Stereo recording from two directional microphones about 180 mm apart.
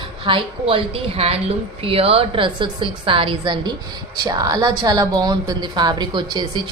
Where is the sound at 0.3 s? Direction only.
30° right (ahead or behind).